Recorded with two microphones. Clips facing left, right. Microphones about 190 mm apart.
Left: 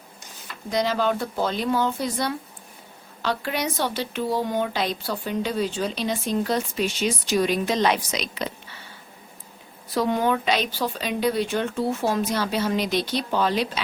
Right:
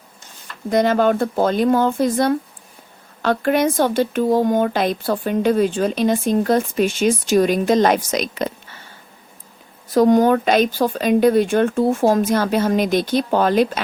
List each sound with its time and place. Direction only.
0.7 s speech: 55° right (ahead or behind)
9.9 s speech: 45° right (ahead or behind)